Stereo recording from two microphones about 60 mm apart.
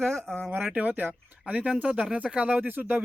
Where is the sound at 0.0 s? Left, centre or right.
Centre.